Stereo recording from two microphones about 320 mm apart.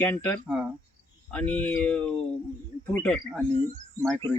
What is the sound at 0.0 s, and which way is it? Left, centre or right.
Speech, centre.